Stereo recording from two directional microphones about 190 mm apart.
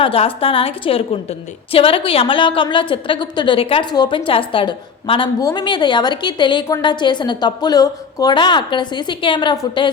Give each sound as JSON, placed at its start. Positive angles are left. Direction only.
{"t": 0.0, "sound": "a woman's voice", "side_deg": 30}